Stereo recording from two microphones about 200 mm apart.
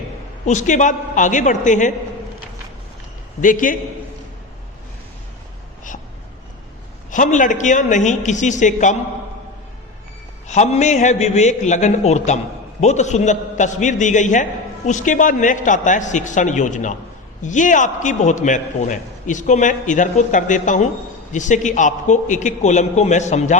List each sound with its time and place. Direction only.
0.4 s a man's voice: 35° left (ahead or behind)
3.4 s a man's voice: 40° left (ahead or behind)
7.1 s a man's voice: 40° left (ahead or behind)
10.5 s a man's voice: 35° left (ahead or behind)